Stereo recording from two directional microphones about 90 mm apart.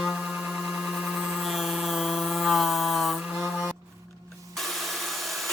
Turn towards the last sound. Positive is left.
turn(degrees=0)  # may be behind; listen again after turning